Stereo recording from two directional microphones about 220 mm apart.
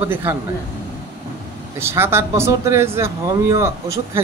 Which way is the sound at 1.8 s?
10° right (ahead or behind).